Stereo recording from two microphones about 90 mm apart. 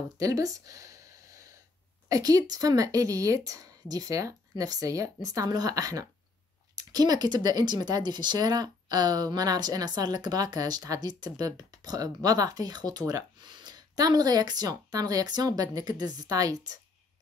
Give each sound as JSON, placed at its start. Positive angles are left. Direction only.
{"t": 0.2, "sound": "a woman's voice", "side_deg": -40}
{"t": 2.0, "sound": "a woman's voice", "side_deg": -40}